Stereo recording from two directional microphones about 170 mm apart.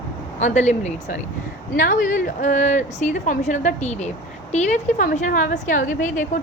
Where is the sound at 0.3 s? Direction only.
45° left (ahead or behind).